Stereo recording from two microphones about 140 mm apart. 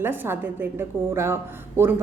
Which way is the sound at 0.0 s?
15° right (ahead or behind).